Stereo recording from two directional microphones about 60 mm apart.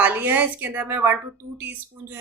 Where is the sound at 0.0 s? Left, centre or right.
Right.